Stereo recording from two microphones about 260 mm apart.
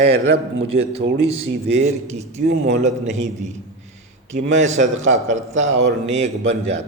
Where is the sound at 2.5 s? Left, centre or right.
Right.